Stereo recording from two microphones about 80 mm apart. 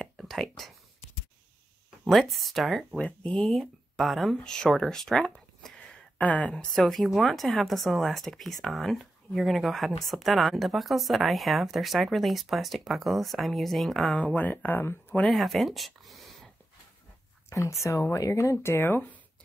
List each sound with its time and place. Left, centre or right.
0.2 s speech: centre
2.0 s speech: centre
6.1 s speech: centre
14.1 s speech: centre
15.2 s speech: centre
17.5 s speech: left